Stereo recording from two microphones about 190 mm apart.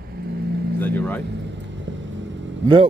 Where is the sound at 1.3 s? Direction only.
70° right (ahead or behind).